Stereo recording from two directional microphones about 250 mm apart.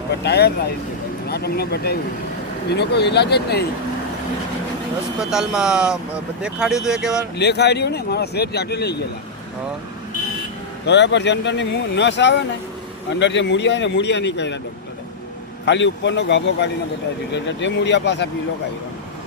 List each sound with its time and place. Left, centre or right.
0.2 s speech: left
5.2 s speech: centre
7.3 s speech: left
10.8 s speech: left
15.6 s speech: left